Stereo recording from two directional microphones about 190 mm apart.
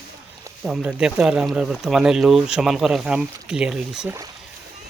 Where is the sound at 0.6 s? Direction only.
5° right (ahead or behind).